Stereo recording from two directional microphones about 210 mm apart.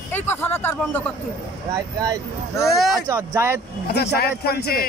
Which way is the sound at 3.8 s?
50° left (ahead or behind).